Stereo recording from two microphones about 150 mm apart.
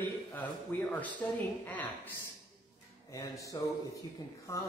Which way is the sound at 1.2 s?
10° left (ahead or behind).